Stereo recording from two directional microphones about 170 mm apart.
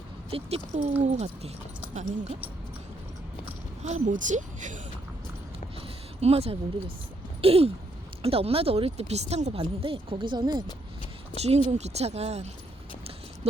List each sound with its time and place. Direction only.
0.3 s speech: 35° right (ahead or behind)
3.8 s a woman's voice: 45° right (ahead or behind)
6.1 s speech: 40° right (ahead or behind)
11.3 s speech: 40° right (ahead or behind)